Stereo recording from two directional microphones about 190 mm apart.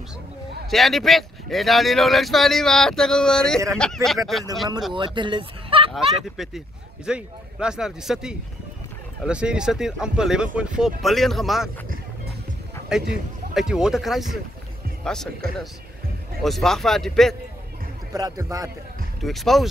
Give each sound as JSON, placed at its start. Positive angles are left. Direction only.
{"t": 0.7, "sound": "speech", "side_deg": 0}
{"t": 4.9, "sound": "speech", "side_deg": -25}
{"t": 5.9, "sound": "speech", "side_deg": 0}
{"t": 12.9, "sound": "speech", "side_deg": -5}
{"t": 16.4, "sound": "speech", "side_deg": 0}
{"t": 18.1, "sound": "a man's voice", "side_deg": -20}
{"t": 19.2, "sound": "speech", "side_deg": 0}